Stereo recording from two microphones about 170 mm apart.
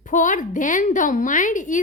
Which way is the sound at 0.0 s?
50° left (ahead or behind).